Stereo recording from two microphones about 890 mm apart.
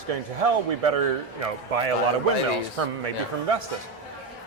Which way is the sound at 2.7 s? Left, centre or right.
Right.